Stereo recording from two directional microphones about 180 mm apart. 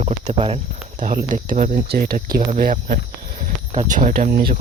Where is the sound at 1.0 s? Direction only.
50° right (ahead or behind).